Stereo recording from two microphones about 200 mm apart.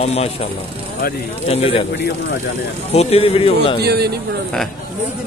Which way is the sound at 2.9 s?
30° left (ahead or behind).